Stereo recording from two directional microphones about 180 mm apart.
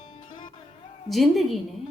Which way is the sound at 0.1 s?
30° left (ahead or behind).